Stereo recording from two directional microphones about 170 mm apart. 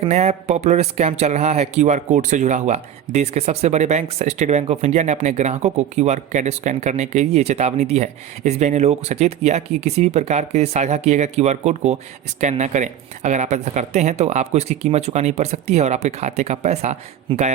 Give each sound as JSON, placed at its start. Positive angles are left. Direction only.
{"t": 0.0, "sound": "speech", "side_deg": -40}